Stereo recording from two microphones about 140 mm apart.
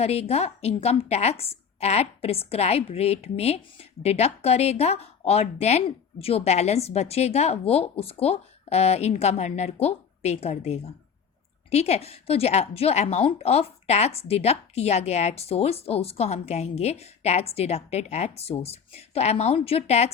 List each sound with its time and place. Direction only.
0.0 s a woman's voice: 45° left (ahead or behind)